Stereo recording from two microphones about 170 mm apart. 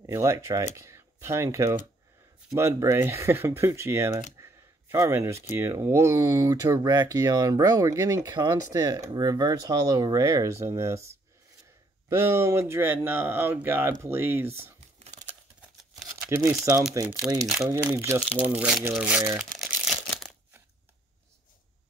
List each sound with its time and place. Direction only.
0.0 s speech: 20° right (ahead or behind)
12.1 s speech: 15° right (ahead or behind)
15.0 s crumpling: 40° right (ahead or behind)
16.3 s speech: 15° right (ahead or behind)
19.2 s speech: 25° right (ahead or behind)
19.6 s crumpling: centre (ahead or behind)